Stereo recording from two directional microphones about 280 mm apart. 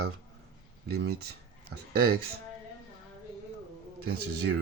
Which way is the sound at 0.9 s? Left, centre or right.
Right.